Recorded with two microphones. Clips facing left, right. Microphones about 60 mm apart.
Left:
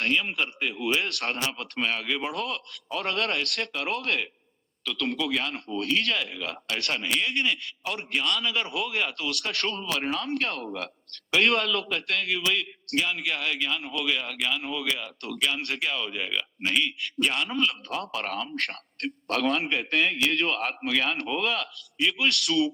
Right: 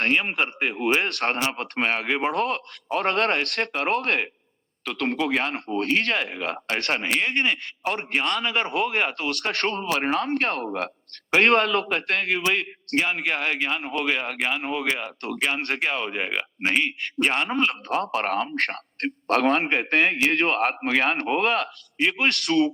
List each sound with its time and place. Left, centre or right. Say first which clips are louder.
0.0 s speech: right 4 dB; right